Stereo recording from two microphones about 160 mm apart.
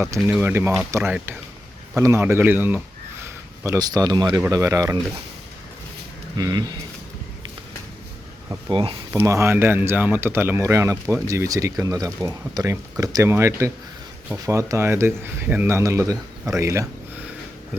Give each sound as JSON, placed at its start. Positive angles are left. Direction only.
{"t": 0.3, "sound": "speech", "side_deg": -10}
{"t": 6.3, "sound": "speech", "side_deg": -25}
{"t": 8.7, "sound": "speech", "side_deg": -35}
{"t": 9.1, "sound": "speech", "side_deg": -15}